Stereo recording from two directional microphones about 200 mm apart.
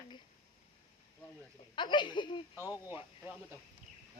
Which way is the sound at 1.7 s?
25° left (ahead or behind).